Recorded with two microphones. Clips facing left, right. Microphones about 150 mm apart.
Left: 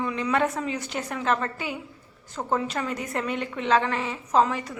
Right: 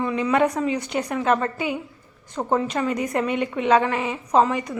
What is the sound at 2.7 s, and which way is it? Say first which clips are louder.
A woman's voice: right 6 dB; 5° right (ahead or behind).